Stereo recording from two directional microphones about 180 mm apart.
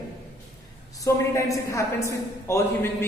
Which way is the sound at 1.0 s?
15° left (ahead or behind).